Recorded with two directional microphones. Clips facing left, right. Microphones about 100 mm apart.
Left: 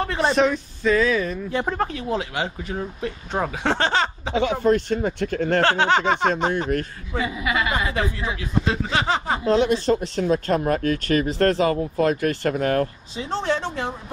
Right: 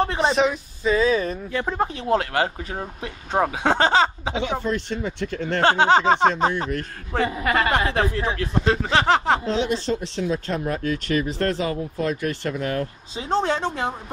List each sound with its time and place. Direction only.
0.0 s a sound: 20° right (ahead or behind)
0.3 s speech: 5° right (ahead or behind)
0.8 s speech: 25° right (ahead or behind)
2.0 s speech: 50° right (ahead or behind)
4.4 s speech: 45° left (ahead or behind)
5.6 s speech: 20° right (ahead or behind)
5.9 s speech: 30° right (ahead or behind)
7.2 s speech: 50° right (ahead or behind); by 9.4 s 70° right (ahead or behind)
9.5 s speech: 50° left (ahead or behind)
11.2 s speech: 45° left (ahead or behind)
13.4 s speech: 35° right (ahead or behind)